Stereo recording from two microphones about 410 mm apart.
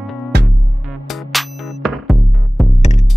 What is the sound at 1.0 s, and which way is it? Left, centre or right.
Music, centre.